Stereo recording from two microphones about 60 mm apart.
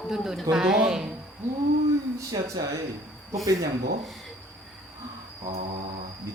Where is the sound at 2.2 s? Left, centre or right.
Right.